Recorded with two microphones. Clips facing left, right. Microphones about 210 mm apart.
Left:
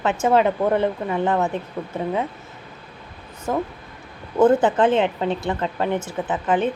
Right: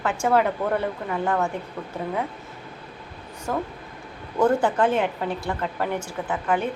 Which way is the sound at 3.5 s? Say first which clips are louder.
Left 4 dB; 20° left (ahead or behind).